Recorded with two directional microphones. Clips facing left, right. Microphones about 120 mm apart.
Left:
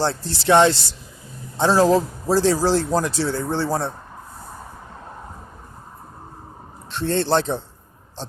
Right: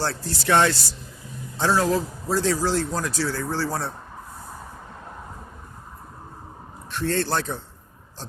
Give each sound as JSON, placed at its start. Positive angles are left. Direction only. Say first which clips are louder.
{"t": 0.0, "sound": "a man's voice", "louder": "left 4 dB", "side_deg": 20}
{"t": 6.9, "sound": "a man's voice", "louder": "left 4 dB", "side_deg": 25}